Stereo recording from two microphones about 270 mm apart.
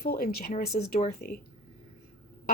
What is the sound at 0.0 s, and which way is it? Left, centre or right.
Speech, left.